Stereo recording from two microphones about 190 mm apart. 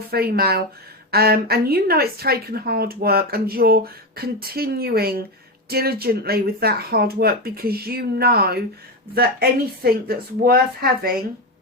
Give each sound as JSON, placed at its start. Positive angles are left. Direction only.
{"t": 0.1, "sound": "speech", "side_deg": -55}